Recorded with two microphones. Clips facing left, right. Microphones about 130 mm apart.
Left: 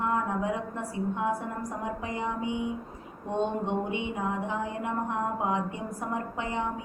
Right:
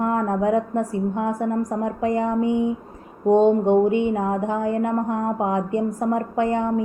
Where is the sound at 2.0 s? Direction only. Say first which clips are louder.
Right 14 dB; 45° right (ahead or behind).